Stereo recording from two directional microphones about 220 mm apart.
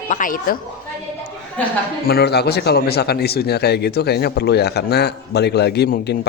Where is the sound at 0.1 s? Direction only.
40° left (ahead or behind).